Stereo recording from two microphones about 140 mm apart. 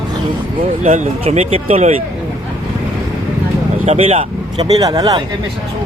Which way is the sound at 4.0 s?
45° right (ahead or behind).